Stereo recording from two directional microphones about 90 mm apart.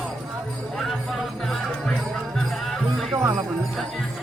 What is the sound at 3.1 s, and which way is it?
Music, 30° right (ahead or behind).